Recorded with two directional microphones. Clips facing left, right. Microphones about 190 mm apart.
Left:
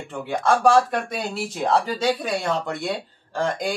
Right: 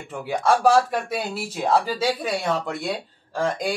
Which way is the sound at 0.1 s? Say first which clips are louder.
Even; 5° right (ahead or behind).